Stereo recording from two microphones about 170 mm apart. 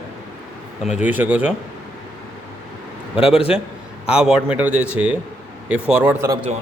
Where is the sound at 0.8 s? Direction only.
5° right (ahead or behind).